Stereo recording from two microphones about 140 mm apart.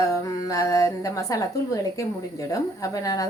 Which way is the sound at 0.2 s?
25° left (ahead or behind).